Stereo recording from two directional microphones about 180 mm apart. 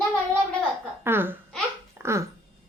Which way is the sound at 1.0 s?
10° right (ahead or behind).